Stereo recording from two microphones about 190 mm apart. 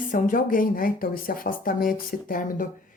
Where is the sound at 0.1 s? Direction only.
45° left (ahead or behind).